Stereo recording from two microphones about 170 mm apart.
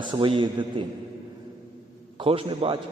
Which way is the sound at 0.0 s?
30° right (ahead or behind).